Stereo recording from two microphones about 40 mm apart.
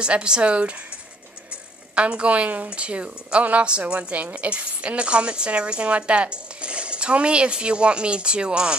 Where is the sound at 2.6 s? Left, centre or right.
Right.